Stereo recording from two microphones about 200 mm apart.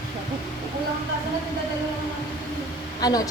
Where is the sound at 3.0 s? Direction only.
20° left (ahead or behind).